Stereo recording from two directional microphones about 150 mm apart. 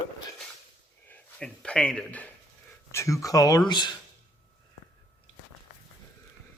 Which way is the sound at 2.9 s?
20° left (ahead or behind).